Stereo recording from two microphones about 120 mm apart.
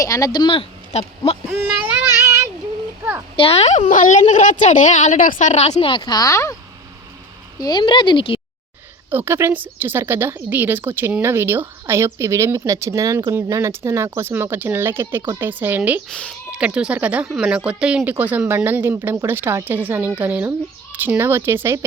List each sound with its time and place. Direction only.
0.0 s speech: 30° left (ahead or behind); by 1.4 s 55° left (ahead or behind)
3.3 s a woman's voice: 55° left (ahead or behind)
5.9 s speech: 40° left (ahead or behind)
7.6 s speech: 40° left (ahead or behind)
9.0 s a woman's voice: 20° right (ahead or behind)
16.0 s speech: 10° left (ahead or behind)
16.5 s a woman's voice: 10° right (ahead or behind)